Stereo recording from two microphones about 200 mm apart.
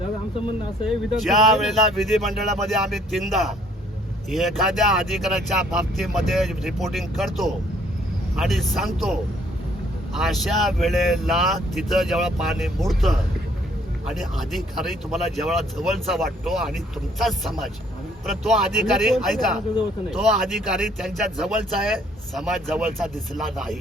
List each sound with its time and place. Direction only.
1.2 s speech: centre (ahead or behind)
10.2 s speech: centre (ahead or behind)